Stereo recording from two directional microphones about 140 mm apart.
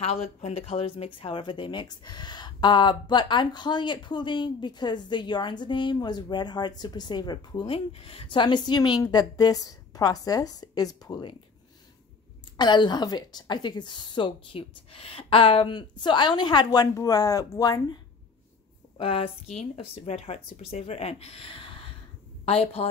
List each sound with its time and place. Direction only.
0.0 s speech: 50° left (ahead or behind); by 11.3 s 30° left (ahead or behind)
12.5 s speech: 30° left (ahead or behind)
18.9 s speech: 40° left (ahead or behind)